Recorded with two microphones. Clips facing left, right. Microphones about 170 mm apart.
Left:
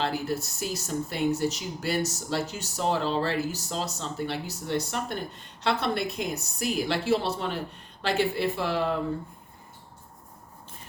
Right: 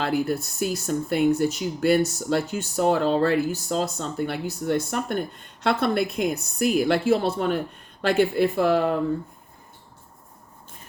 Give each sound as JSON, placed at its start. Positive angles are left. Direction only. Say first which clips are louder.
{"t": 0.0, "sound": "speech", "louder": "right 5 dB", "side_deg": -55}